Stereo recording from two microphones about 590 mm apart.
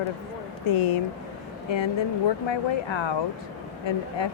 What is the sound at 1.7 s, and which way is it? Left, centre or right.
A woman's voice, left.